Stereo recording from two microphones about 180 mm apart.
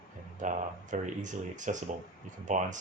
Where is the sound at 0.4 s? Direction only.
45° right (ahead or behind).